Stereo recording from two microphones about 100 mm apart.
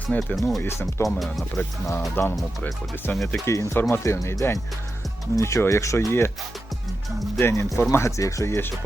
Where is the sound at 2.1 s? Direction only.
25° left (ahead or behind).